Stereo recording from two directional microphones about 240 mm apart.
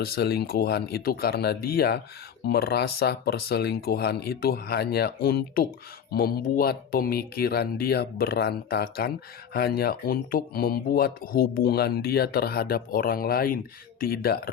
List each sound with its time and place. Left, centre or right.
0.0 s speech: left